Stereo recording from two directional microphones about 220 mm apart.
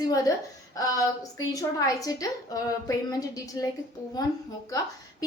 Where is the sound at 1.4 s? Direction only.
15° left (ahead or behind).